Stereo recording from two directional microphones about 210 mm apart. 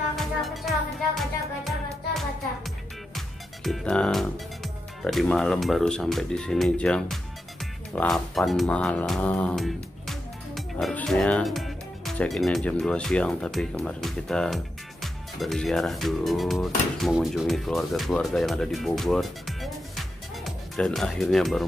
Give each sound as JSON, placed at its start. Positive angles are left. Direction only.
{"t": 0.1, "sound": "music", "side_deg": 0}
{"t": 5.0, "sound": "speech", "side_deg": 0}